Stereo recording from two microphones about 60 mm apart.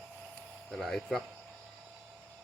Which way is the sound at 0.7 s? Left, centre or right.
Centre.